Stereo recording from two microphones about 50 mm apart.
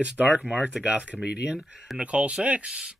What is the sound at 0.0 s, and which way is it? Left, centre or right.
Speech, right.